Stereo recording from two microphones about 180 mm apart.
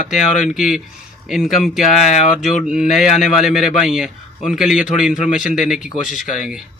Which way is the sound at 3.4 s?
5° right (ahead or behind).